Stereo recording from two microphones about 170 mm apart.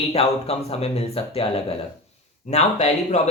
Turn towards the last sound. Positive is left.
turn(degrees=40)  # may be behind; listen again after turning